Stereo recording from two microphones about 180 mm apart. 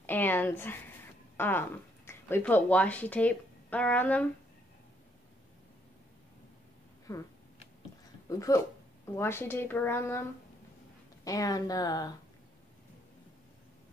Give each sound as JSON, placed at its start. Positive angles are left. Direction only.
{"t": 0.0, "sound": "a sound", "side_deg": 10}
{"t": 1.3, "sound": "speech", "side_deg": 10}
{"t": 7.1, "sound": "a woman's voice", "side_deg": 15}
{"t": 8.3, "sound": "a woman's voice", "side_deg": 20}
{"t": 11.2, "sound": "speech", "side_deg": 20}